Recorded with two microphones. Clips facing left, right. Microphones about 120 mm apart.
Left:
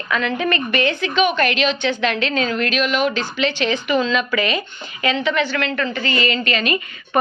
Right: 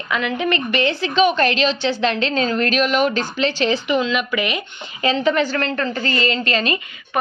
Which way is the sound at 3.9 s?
15° right (ahead or behind).